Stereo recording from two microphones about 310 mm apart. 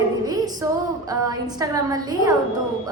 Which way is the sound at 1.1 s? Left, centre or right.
Centre.